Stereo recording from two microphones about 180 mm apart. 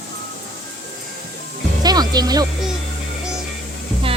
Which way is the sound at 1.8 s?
20° right (ahead or behind).